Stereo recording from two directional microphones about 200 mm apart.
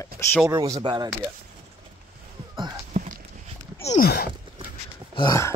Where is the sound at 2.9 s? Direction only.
40° right (ahead or behind).